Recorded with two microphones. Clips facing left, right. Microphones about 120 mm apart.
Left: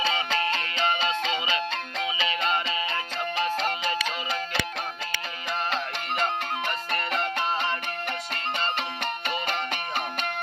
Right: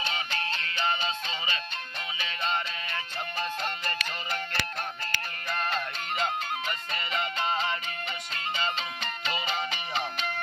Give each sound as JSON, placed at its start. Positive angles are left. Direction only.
{"t": 1.0, "sound": "music", "side_deg": 85}